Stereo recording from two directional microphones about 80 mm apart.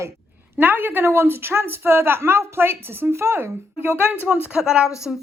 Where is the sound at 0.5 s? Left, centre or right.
Right.